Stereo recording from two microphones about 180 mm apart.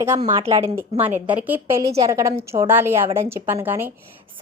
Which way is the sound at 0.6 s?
10° right (ahead or behind).